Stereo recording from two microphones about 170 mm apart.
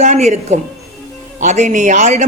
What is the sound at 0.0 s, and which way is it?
A man's voice, 45° right (ahead or behind).